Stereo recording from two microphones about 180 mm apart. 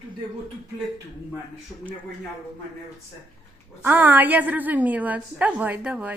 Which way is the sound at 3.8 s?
10° right (ahead or behind).